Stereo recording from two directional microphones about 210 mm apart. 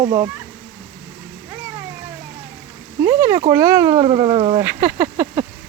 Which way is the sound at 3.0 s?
10° right (ahead or behind).